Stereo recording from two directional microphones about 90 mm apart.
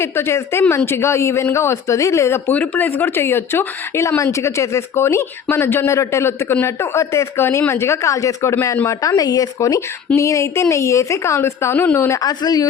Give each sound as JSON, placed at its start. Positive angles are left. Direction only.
{"t": 0.0, "sound": "speech", "side_deg": 30}
{"t": 2.5, "sound": "speech", "side_deg": 20}
{"t": 10.2, "sound": "speech", "side_deg": 35}
{"t": 12.2, "sound": "speech", "side_deg": 50}